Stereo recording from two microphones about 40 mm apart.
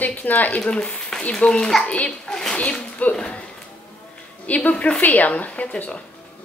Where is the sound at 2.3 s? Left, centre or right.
Centre.